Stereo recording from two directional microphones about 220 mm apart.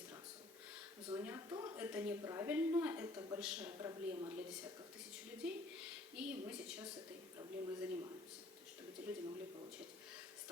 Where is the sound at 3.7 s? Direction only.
15° right (ahead or behind).